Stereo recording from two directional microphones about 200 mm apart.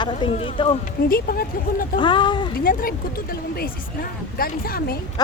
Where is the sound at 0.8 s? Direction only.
45° left (ahead or behind).